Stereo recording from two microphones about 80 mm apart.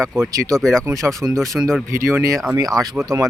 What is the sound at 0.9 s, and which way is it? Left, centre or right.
Speech, right.